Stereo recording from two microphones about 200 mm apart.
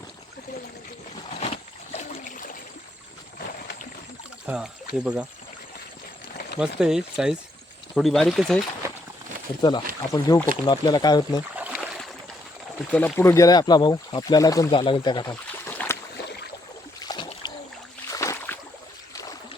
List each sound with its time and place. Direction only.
4.4 s speech: 5° right (ahead or behind)
6.6 s speech: 5° right (ahead or behind)
9.6 s speech: 20° left (ahead or behind)
11.5 s a sound: 5° right (ahead or behind)
12.9 s speech: 5° left (ahead or behind)
15.6 s boat: 10° left (ahead or behind)
17.0 s boat: 20° left (ahead or behind)